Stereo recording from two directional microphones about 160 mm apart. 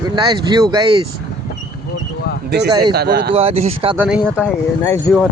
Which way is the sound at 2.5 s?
90° right.